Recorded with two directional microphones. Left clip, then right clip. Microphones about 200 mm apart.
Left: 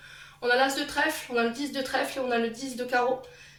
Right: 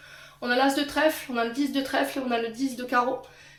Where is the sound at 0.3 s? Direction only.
50° right (ahead or behind).